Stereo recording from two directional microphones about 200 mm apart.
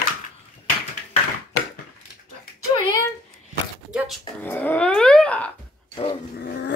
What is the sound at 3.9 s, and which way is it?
Dog, 5° right (ahead or behind).